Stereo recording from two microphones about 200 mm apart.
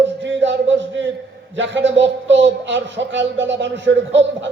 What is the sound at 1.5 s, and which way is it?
A man's voice, 65° right (ahead or behind).